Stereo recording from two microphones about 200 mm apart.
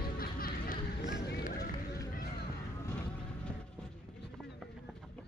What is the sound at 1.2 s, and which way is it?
Run, 55° left (ahead or behind).